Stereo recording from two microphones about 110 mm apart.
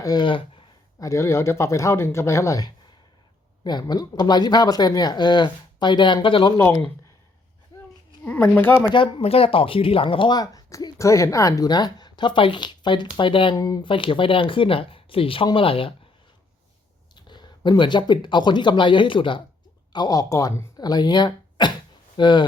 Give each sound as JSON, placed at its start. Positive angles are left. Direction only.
{"t": 0.0, "sound": "speech", "side_deg": 40}
{"t": 0.9, "sound": "speech", "side_deg": 30}
{"t": 8.2, "sound": "speech", "side_deg": 15}
{"t": 8.9, "sound": "speech", "side_deg": 50}
{"t": 13.6, "sound": "speech", "side_deg": 35}
{"t": 13.8, "sound": "speech", "side_deg": 50}
{"t": 17.2, "sound": "speech", "side_deg": 45}
{"t": 19.9, "sound": "speech", "side_deg": 35}
{"t": 20.7, "sound": "speech", "side_deg": 40}